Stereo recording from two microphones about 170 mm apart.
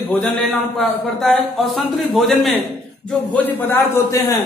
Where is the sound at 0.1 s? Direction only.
10° left (ahead or behind).